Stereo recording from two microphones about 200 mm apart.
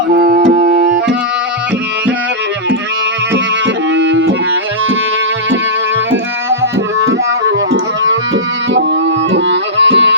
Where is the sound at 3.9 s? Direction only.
65° right (ahead or behind).